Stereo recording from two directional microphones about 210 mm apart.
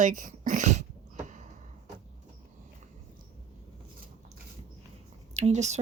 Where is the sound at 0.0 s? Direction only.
40° right (ahead or behind).